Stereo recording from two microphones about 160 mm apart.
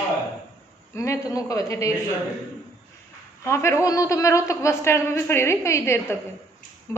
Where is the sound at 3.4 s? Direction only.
15° left (ahead or behind).